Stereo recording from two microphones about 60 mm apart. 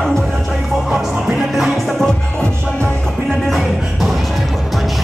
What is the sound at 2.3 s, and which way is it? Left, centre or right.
Music, centre.